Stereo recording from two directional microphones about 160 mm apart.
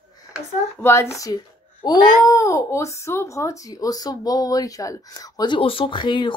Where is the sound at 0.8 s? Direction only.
15° left (ahead or behind).